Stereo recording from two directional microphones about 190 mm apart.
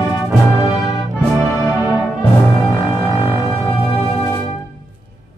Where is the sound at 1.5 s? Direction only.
Centre (ahead or behind).